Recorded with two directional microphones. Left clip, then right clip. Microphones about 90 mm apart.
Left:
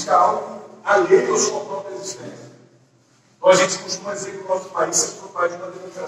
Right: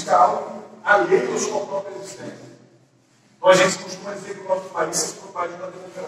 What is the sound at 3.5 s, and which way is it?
A man's voice, 40° left (ahead or behind).